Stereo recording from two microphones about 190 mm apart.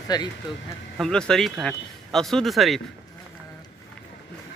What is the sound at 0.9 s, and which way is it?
Speech, 5° left (ahead or behind).